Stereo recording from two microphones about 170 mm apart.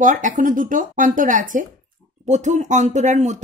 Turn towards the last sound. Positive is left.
turn(degrees=-45)  # may be behind; listen again after turning